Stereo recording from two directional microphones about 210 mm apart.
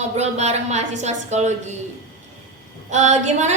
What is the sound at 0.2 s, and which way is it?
A woman's voice, 30° right (ahead or behind).